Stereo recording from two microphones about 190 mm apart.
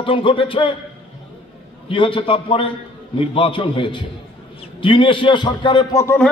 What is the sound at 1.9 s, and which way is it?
Speech, 25° left (ahead or behind).